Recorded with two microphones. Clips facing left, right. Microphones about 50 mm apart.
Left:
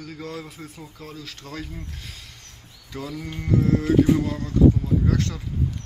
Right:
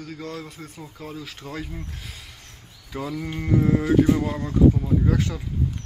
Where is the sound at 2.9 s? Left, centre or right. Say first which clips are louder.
Right 3 dB; centre.